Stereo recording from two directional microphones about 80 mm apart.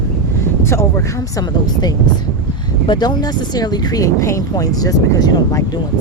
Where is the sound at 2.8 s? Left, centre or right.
Left.